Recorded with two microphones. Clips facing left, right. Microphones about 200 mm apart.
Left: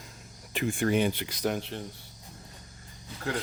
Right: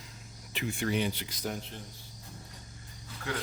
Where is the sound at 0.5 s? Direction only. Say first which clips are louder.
Left 5 dB; 50° left (ahead or behind); by 1.8 s 75° left (ahead or behind).